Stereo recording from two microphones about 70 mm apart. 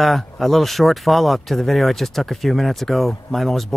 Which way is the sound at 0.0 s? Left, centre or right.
Centre.